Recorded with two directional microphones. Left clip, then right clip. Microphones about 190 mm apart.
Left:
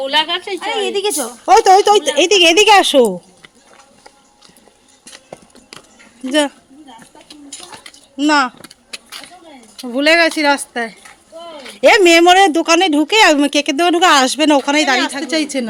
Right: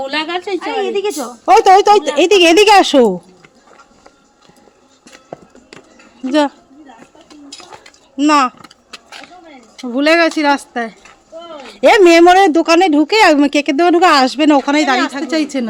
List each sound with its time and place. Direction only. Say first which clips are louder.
0.0 s a woman's voice: left 3 dB; 60° right (ahead or behind)
1.0 s speech: right 1 dB; 15° right (ahead or behind)
5.1 s clip-clop: right 3 dB; 25° right (ahead or behind)
6.2 s speech: right 2 dB; 5° right (ahead or behind)
8.1 s vehicle: right 2 dB; 5° right (ahead or behind)
9.7 s speech: even; centre (ahead or behind)